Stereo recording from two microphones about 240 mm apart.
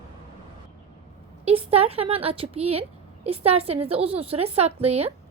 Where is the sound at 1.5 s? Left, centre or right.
Right.